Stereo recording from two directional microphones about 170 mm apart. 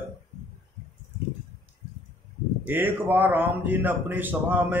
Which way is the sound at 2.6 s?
10° right (ahead or behind).